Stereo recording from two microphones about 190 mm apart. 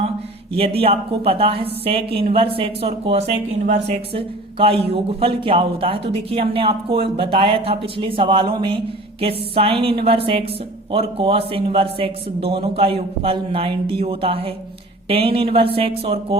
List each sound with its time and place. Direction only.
0.5 s speech: 30° right (ahead or behind)